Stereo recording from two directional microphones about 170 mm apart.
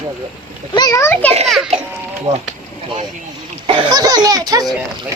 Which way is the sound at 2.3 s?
20° right (ahead or behind).